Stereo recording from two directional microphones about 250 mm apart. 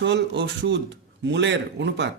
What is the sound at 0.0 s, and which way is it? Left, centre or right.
Speech, right.